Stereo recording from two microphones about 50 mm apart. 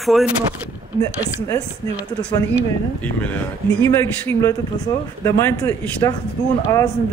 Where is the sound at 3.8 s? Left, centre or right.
Left.